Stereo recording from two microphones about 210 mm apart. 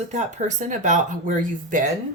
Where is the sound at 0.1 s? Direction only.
35° right (ahead or behind).